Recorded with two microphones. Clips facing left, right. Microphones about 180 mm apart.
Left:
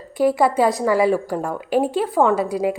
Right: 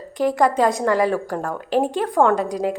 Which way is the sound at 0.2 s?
10° left (ahead or behind).